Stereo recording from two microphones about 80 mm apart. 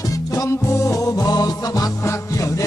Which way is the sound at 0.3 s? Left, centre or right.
Left.